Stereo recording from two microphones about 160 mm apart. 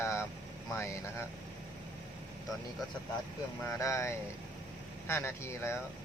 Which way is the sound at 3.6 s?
20° left (ahead or behind).